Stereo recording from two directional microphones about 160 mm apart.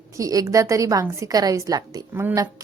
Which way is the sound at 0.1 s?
20° right (ahead or behind).